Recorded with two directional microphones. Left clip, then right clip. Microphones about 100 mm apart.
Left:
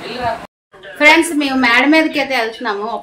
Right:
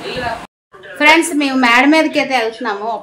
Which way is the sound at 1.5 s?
65° right (ahead or behind).